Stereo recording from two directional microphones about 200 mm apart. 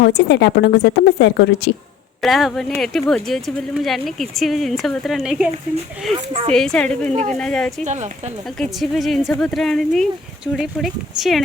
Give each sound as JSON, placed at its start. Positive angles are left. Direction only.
{"t": 0.0, "sound": "a woman's voice", "side_deg": 55}
{"t": 2.2, "sound": "speech", "side_deg": 0}
{"t": 6.5, "sound": "speech", "side_deg": 5}
{"t": 7.9, "sound": "speech", "side_deg": -35}
{"t": 8.4, "sound": "speech", "side_deg": 0}